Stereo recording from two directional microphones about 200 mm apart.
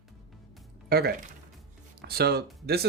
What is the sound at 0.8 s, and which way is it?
Speech, 50° right (ahead or behind).